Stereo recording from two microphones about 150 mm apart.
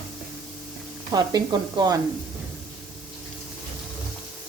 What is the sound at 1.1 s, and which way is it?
Speech, 25° right (ahead or behind).